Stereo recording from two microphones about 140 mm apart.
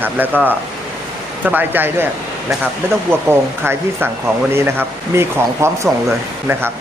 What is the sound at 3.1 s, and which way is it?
Speech, 15° right (ahead or behind).